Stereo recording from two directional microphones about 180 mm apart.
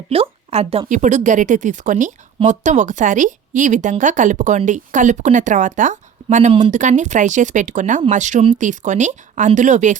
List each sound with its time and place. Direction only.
0.1 s a woman's voice: 35° right (ahead or behind)
0.9 s a woman's voice: 45° right (ahead or behind)